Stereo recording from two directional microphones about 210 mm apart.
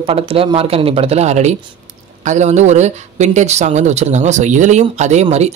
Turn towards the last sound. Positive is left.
turn(degrees=-30)  # may be behind; listen again after turning